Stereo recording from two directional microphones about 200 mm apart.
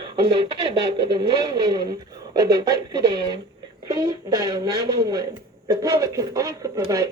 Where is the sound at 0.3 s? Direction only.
25° right (ahead or behind).